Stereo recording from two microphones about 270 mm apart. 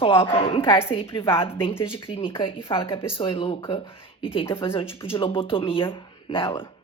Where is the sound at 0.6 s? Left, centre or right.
Centre.